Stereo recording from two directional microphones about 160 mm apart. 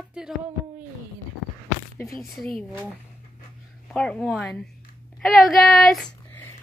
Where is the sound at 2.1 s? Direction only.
Centre (ahead or behind).